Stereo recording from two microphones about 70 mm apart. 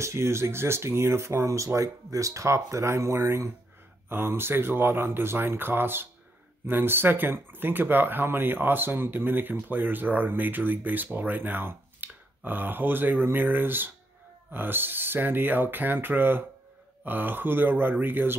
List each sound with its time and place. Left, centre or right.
0.0 s speech: right